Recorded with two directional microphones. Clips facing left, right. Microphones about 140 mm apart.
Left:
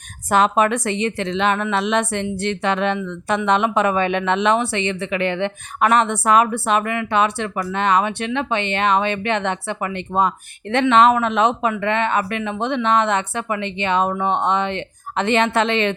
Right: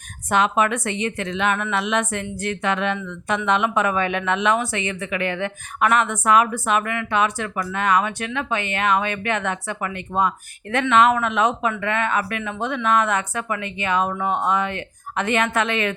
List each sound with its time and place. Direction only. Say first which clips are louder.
0.3 s a woman's voice: left 3 dB; 35° left (ahead or behind)